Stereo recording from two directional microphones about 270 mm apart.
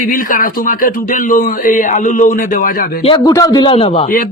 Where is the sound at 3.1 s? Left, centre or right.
Centre.